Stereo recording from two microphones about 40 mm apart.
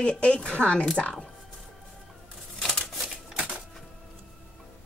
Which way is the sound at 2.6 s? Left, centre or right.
Centre.